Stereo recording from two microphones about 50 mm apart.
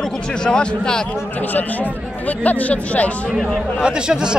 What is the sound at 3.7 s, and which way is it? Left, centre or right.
Speech, centre.